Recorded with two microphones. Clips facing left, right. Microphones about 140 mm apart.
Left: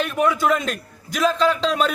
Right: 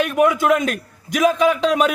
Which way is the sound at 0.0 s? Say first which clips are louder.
Right 3 dB; 15° right (ahead or behind).